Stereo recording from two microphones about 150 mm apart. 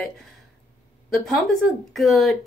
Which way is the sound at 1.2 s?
Centre (ahead or behind).